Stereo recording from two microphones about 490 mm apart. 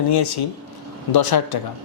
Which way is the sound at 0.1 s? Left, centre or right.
Left.